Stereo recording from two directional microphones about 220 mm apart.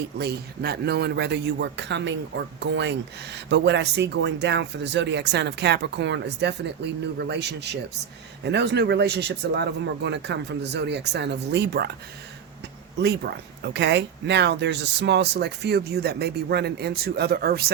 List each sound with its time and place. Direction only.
0.0 s speech: 45° right (ahead or behind)
13.0 s speech: 50° right (ahead or behind)